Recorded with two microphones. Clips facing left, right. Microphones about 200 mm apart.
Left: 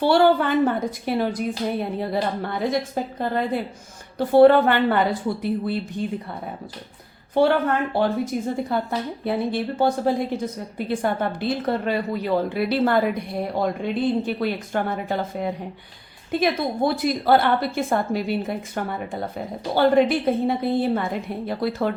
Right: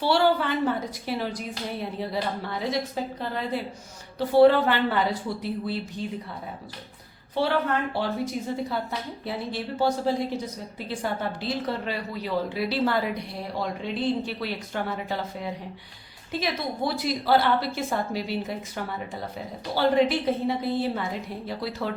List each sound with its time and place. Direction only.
0.0 s a woman's voice: 50° left (ahead or behind)
7.4 s a woman's voice: 50° left (ahead or behind)